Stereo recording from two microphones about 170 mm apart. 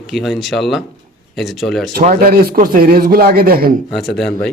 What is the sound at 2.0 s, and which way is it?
A man's voice, 55° right (ahead or behind).